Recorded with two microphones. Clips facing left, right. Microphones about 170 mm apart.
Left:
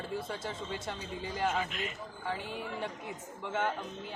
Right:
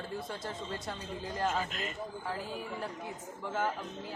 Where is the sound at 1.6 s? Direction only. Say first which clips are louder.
Left 1 dB; 35° right (ahead or behind).